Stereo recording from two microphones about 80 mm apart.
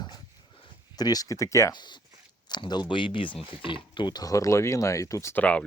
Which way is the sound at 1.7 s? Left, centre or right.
Left.